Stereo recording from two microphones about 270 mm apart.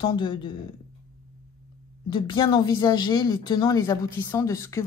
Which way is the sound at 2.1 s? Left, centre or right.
Centre.